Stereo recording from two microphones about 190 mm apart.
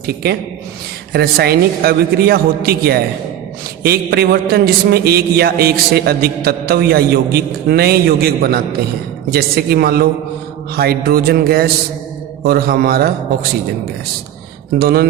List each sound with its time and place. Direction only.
0.0 s a man's voice: 60° right (ahead or behind)
14.8 s speech: 55° right (ahead or behind)